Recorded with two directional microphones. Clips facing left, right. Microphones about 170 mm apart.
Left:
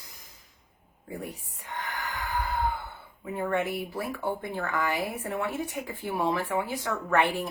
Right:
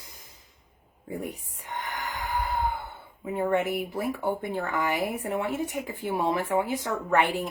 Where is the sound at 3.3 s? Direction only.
20° right (ahead or behind).